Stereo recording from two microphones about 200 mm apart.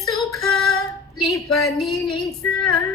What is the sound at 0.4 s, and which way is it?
Female singing, centre (ahead or behind).